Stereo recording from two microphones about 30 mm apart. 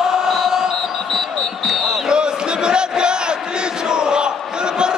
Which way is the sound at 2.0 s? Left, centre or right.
Right.